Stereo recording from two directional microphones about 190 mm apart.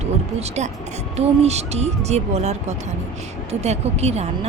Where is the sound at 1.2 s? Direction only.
35° right (ahead or behind).